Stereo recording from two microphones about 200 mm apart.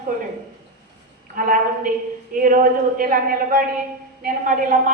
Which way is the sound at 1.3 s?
45° right (ahead or behind).